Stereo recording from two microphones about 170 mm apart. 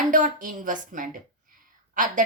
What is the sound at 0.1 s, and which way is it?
A woman's voice, 50° right (ahead or behind).